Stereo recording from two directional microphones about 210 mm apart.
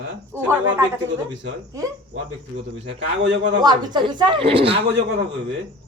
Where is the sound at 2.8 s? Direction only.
55° right (ahead or behind).